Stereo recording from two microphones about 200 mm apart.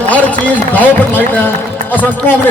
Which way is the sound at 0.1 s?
5° left (ahead or behind).